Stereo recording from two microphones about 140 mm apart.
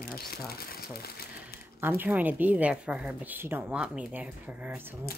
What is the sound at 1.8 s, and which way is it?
A woman's voice, 15° right (ahead or behind).